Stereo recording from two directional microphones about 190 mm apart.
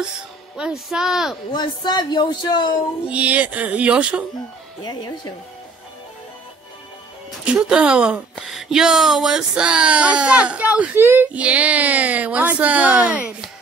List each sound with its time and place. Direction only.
0.6 s music: 5° right (ahead or behind)
1.5 s a man's voice: 20° left (ahead or behind)
3.1 s speech: 5° right (ahead or behind)
4.8 s a man's voice: 20° left (ahead or behind)
7.6 s music: 5° right (ahead or behind)
8.4 s speech: centre (ahead or behind)